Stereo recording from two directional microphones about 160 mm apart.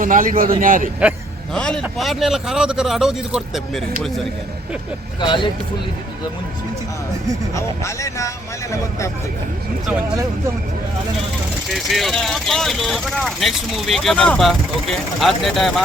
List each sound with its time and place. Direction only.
0.0 s a man's voice: 55° right (ahead or behind)
1.5 s speech: 5° left (ahead or behind)
5.2 s speech: 30° left (ahead or behind)
7.5 s speech: 20° left (ahead or behind)
11.7 s speech: centre (ahead or behind)